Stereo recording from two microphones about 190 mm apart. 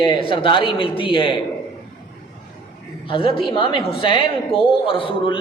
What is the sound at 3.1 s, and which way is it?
A woman's voice, 30° left (ahead or behind).